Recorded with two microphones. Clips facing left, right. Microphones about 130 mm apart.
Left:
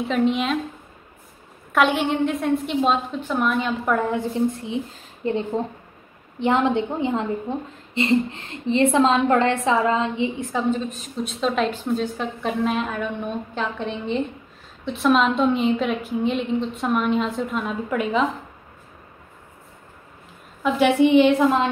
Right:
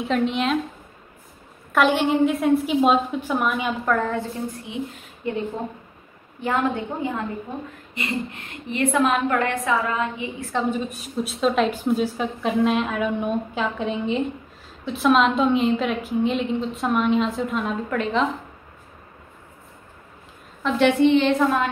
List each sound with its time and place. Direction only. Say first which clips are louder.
0.0 s a woman's voice: left 1 dB; centre (ahead or behind)
1.7 s a woman's voice: right 1 dB; centre (ahead or behind)
3.8 s a woman's voice: left 1 dB; 15° left (ahead or behind)
5.2 s a woman's voice: left 3 dB; 30° left (ahead or behind)
6.4 s a woman's voice: left 4 dB; 20° left (ahead or behind)
10.7 s a woman's voice: left 2 dB; 10° right (ahead or behind); by 18.2 s 5° left (ahead or behind)
20.6 s a woman's voice: even; 5° left (ahead or behind)